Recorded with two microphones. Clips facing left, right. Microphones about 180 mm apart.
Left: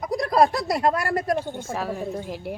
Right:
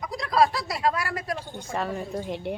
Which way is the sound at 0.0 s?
45° left (ahead or behind).